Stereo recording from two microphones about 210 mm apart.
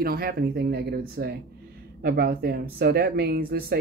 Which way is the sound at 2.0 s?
45° right (ahead or behind).